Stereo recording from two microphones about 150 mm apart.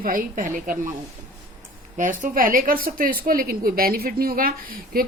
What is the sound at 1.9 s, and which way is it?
A woman's voice, 60° right (ahead or behind).